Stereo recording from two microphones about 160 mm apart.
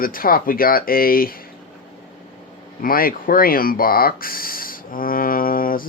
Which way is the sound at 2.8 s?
65° left (ahead or behind).